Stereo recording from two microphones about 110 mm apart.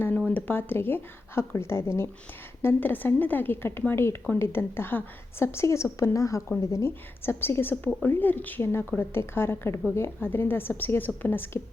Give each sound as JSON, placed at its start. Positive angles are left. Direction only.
{"t": 0.3, "sound": "a woman's voice", "side_deg": 20}